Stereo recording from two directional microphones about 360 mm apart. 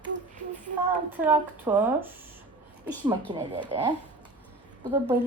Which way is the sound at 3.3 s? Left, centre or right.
Centre.